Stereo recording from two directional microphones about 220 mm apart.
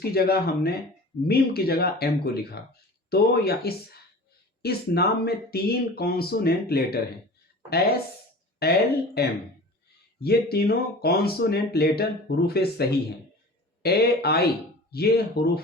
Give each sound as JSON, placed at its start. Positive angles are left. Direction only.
{"t": 0.1, "sound": "speech", "side_deg": 45}